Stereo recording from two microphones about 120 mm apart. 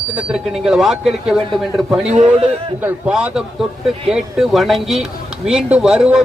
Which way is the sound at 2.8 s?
15° right (ahead or behind).